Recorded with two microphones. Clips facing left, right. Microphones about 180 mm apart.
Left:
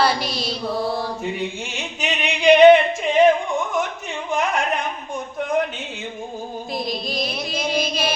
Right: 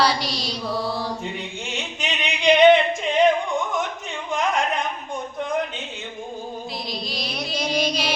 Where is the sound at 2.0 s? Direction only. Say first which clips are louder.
Left 6 dB; 5° left (ahead or behind).